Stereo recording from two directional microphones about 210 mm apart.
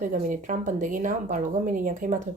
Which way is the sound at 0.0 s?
40° right (ahead or behind).